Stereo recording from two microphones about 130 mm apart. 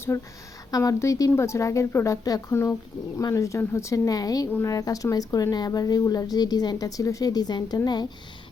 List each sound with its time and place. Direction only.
0.1 s speech: 20° left (ahead or behind)